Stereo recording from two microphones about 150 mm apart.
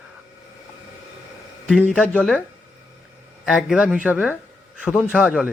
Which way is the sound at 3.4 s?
5° right (ahead or behind).